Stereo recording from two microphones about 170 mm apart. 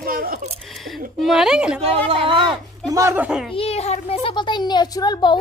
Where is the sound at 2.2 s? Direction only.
30° right (ahead or behind).